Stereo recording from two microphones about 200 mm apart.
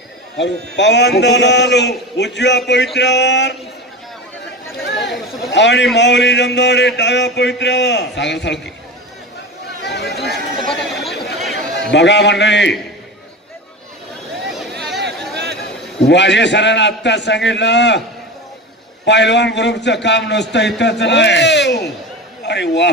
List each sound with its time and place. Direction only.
0.4 s a man's voice: 60° left (ahead or behind)
5.5 s a man's voice: 60° left (ahead or behind)
9.8 s chatter: 55° left (ahead or behind)
10.3 s chatter: centre (ahead or behind)
11.7 s a man's voice: 60° left (ahead or behind)
14.5 s a sound: centre (ahead or behind)
15.0 s a sound: 55° right (ahead or behind)
16.0 s a man's voice: 60° left (ahead or behind)
19.0 s a man's voice: 60° left (ahead or behind)